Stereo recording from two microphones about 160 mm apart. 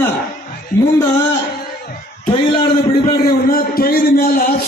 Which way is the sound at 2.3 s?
35° left (ahead or behind).